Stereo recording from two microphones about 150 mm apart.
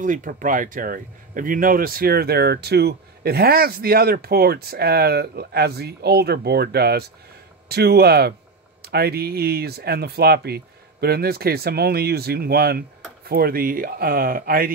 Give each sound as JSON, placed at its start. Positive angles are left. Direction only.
{"t": 0.0, "sound": "speech", "side_deg": -60}